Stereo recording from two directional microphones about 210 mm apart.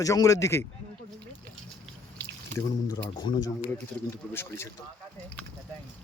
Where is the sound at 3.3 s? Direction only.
25° left (ahead or behind).